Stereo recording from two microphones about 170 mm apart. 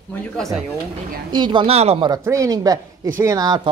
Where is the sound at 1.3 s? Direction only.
25° right (ahead or behind).